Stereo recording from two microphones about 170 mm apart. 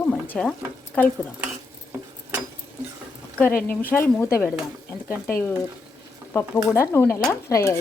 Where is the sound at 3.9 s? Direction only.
15° left (ahead or behind).